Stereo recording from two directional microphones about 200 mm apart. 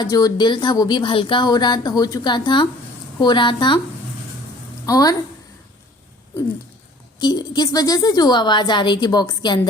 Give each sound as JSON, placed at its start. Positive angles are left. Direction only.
{"t": 0.0, "sound": "a woman's voice", "side_deg": 20}
{"t": 4.9, "sound": "a woman's voice", "side_deg": 20}
{"t": 7.2, "sound": "a woman's voice", "side_deg": 20}